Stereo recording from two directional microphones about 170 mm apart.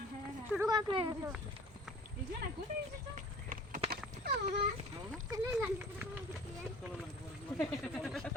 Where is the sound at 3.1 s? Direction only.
50° right (ahead or behind).